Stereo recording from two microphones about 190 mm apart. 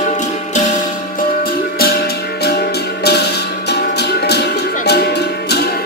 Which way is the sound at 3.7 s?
60° left (ahead or behind).